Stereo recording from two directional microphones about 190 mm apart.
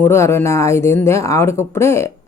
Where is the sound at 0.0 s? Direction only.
15° left (ahead or behind).